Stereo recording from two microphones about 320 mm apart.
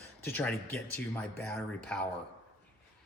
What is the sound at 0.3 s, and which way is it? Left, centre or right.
Speech, centre.